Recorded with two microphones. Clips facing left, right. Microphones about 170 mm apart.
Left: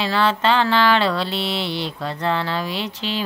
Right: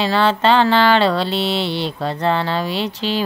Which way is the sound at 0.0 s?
30° right (ahead or behind).